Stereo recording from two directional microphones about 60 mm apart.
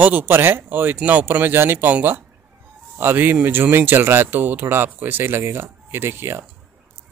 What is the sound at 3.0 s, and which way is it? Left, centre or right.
Speech, right.